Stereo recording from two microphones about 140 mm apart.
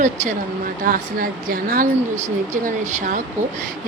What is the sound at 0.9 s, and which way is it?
Speech, 90° right.